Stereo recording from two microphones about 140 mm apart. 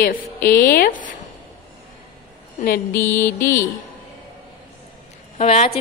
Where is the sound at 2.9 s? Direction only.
15° left (ahead or behind).